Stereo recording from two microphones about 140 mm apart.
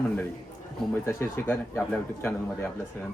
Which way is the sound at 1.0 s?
15° left (ahead or behind).